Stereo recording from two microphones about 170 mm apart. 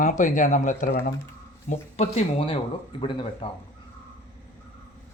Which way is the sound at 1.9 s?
40° left (ahead or behind).